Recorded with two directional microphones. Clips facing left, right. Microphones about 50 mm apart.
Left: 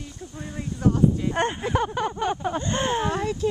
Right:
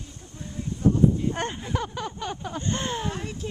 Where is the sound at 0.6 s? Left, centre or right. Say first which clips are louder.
Even; left.